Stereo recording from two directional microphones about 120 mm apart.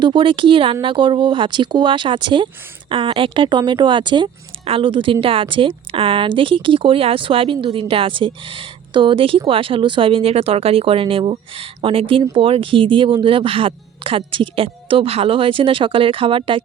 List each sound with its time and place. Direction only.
0.0 s speech: 45° right (ahead or behind)